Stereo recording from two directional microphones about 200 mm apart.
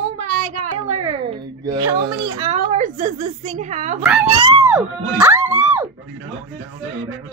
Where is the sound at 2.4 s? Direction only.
40° right (ahead or behind).